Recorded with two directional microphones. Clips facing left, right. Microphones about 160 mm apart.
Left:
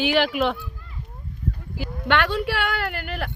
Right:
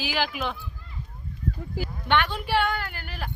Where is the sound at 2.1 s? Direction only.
75° left (ahead or behind).